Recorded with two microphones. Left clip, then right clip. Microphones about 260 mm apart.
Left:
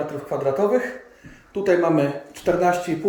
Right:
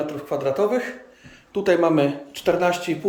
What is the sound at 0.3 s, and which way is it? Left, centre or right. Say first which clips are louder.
Speech: left 1 dB; centre.